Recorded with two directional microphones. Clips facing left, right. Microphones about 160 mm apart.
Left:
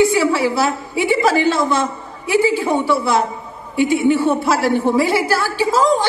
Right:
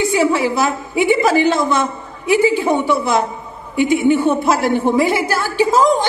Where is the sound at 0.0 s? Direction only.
20° right (ahead or behind).